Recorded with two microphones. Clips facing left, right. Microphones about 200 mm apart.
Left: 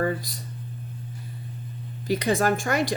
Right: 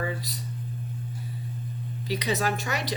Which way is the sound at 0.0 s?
45° left (ahead or behind).